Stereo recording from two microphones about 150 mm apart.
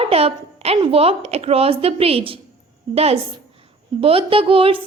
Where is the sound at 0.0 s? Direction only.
40° right (ahead or behind).